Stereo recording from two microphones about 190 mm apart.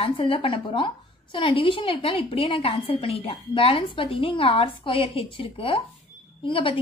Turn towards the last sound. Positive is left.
turn(degrees=25)  # may be behind; listen again after turning